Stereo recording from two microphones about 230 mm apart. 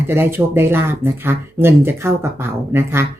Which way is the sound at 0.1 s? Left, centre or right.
Centre.